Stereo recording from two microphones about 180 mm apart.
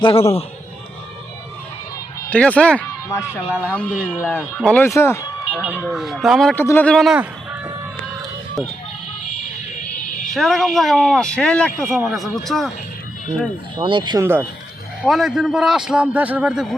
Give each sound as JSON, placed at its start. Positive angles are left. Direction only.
{"t": 0.0, "sound": "a man's voice", "side_deg": 30}
{"t": 2.3, "sound": "speech", "side_deg": 5}
{"t": 3.4, "sound": "a man's voice", "side_deg": -5}
{"t": 3.7, "sound": "speech", "side_deg": 10}
{"t": 5.5, "sound": "a man's voice", "side_deg": -5}
{"t": 10.2, "sound": "a man's voice", "side_deg": 0}
{"t": 13.7, "sound": "speech", "side_deg": -25}
{"t": 15.0, "sound": "a man's voice", "side_deg": 0}